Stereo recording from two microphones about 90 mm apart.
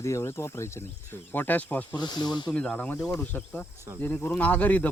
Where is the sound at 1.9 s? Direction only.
50° left (ahead or behind).